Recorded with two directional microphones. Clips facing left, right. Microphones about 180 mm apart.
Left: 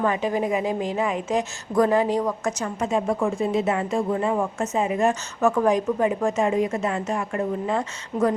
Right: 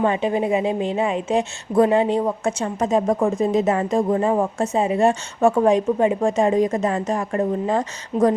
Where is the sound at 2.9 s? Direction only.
40° right (ahead or behind).